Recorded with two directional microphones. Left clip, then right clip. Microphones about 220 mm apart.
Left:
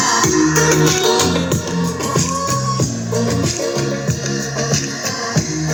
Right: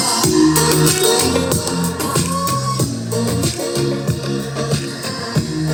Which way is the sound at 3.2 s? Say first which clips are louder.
Left 2 dB; 20° right (ahead or behind).